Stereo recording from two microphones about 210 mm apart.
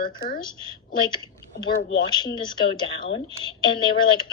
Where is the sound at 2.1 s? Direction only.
20° left (ahead or behind).